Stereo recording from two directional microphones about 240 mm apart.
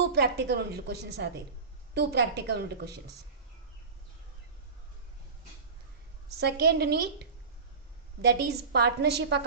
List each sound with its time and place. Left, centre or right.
0.0 s a woman's voice: right
6.4 s a woman's voice: right